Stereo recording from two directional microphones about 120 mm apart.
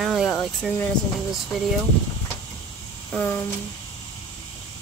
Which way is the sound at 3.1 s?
20° left (ahead or behind).